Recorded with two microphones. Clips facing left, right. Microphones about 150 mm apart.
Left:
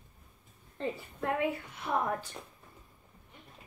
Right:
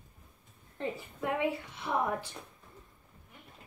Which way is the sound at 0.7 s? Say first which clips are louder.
Left 1 dB; 15° right (ahead or behind).